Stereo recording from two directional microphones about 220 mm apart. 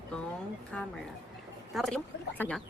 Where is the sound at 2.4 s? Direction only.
10° right (ahead or behind).